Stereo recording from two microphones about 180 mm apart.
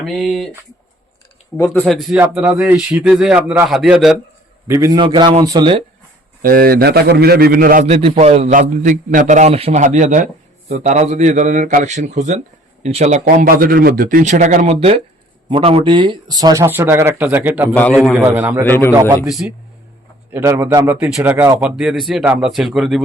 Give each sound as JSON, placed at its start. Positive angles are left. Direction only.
{"t": 0.0, "sound": "speech", "side_deg": 0}
{"t": 1.5, "sound": "a man's voice", "side_deg": 15}
{"t": 1.8, "sound": "speech", "side_deg": 0}
{"t": 2.1, "sound": "speech", "side_deg": -10}
{"t": 4.7, "sound": "speech", "side_deg": -20}
{"t": 6.4, "sound": "a man's voice", "side_deg": -55}
{"t": 7.9, "sound": "a man's voice", "side_deg": -35}
{"t": 13.2, "sound": "speech", "side_deg": -55}
{"t": 17.7, "sound": "speech", "side_deg": 5}
{"t": 18.2, "sound": "a man's voice", "side_deg": -10}
{"t": 18.6, "sound": "a man's voice", "side_deg": 10}
{"t": 19.2, "sound": "speech", "side_deg": -5}
{"t": 20.3, "sound": "a man's voice", "side_deg": -15}